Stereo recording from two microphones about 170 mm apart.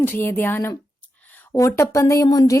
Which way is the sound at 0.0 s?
10° left (ahead or behind).